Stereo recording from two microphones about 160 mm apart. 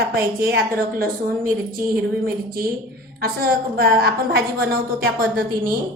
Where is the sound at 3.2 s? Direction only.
70° right (ahead or behind).